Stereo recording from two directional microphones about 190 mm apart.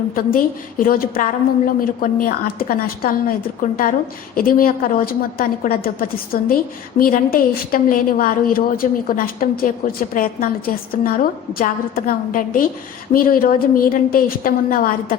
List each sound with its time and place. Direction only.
0.1 s a woman's voice: 50° left (ahead or behind)